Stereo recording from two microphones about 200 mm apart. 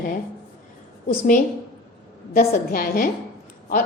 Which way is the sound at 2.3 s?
45° left (ahead or behind).